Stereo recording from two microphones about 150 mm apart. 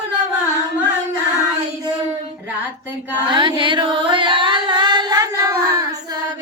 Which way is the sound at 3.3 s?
30° right (ahead or behind).